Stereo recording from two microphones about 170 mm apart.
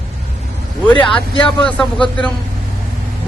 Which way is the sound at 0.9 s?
5° left (ahead or behind).